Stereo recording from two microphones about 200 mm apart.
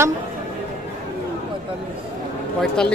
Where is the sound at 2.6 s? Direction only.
5° left (ahead or behind).